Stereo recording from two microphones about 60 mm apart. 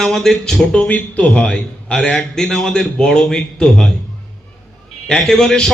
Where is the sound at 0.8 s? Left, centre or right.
Left.